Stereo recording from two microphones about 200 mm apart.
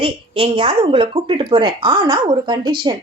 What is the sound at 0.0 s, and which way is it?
Speech, 30° right (ahead or behind).